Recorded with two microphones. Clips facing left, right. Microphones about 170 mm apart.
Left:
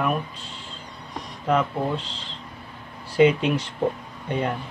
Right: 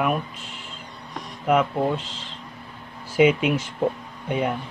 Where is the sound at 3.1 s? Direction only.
5° right (ahead or behind).